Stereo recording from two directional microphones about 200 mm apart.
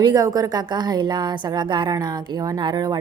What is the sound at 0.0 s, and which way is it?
A woman's voice, 20° right (ahead or behind).